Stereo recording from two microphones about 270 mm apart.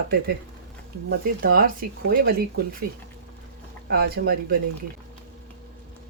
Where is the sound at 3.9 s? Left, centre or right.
Right.